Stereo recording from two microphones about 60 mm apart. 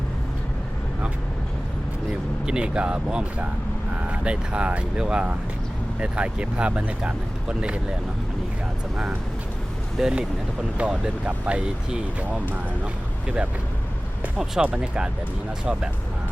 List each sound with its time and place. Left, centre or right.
2.5 s speech: centre
10.0 s speech: centre
14.3 s speech: centre